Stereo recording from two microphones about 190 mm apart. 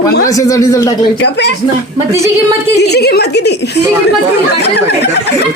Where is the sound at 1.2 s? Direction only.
60° left (ahead or behind).